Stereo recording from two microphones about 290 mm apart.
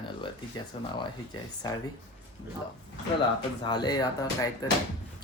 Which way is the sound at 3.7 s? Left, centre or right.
Centre.